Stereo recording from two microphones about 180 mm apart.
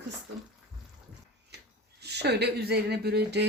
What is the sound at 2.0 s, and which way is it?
Speech, 65° right (ahead or behind).